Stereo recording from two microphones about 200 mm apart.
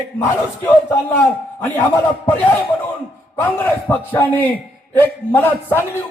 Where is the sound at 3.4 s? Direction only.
10° left (ahead or behind).